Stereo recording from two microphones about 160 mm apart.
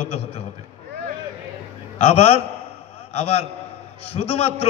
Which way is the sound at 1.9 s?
40° left (ahead or behind).